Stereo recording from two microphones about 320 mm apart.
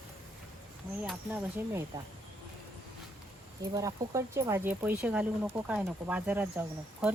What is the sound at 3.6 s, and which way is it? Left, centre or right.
Speech, centre.